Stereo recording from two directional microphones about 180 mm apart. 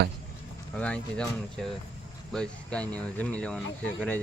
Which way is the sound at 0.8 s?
5° left (ahead or behind).